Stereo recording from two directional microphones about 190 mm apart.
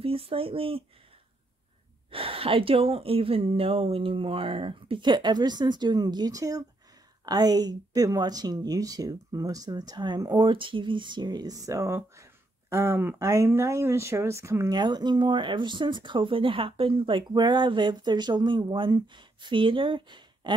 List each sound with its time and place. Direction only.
0.0 s speech: 30° right (ahead or behind)
2.0 s speech: 30° right (ahead or behind)